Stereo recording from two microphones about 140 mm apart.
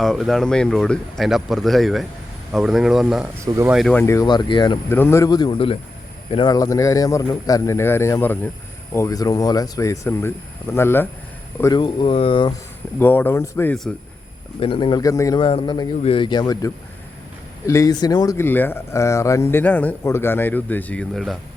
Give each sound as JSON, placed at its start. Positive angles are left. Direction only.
{"t": 0.0, "sound": "speech", "side_deg": 0}
{"t": 3.4, "sound": "speech", "side_deg": -20}
{"t": 3.7, "sound": "speech", "side_deg": 0}
{"t": 3.9, "sound": "speech", "side_deg": 20}
{"t": 4.3, "sound": "speech", "side_deg": 35}
{"t": 4.9, "sound": "speech", "side_deg": 15}
{"t": 6.3, "sound": "speech", "side_deg": 30}
{"t": 11.6, "sound": "speech", "side_deg": 30}
{"t": 13.0, "sound": "speech", "side_deg": 15}
{"t": 14.6, "sound": "speech", "side_deg": 40}
{"t": 15.4, "sound": "speech", "side_deg": 40}